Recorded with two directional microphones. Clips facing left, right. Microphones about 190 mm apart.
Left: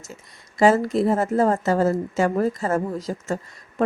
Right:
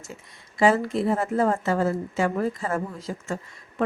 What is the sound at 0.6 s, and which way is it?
Speech, 40° left (ahead or behind).